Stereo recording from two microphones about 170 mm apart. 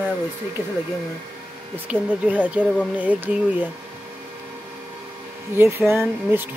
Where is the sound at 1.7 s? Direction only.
10° right (ahead or behind).